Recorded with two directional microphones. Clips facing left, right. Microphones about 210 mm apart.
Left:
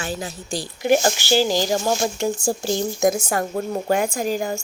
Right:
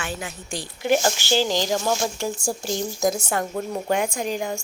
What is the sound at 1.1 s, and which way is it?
Speech, 10° left (ahead or behind).